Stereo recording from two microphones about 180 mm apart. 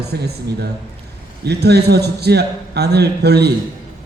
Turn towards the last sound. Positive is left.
turn(degrees=-65)  # may be behind; listen again after turning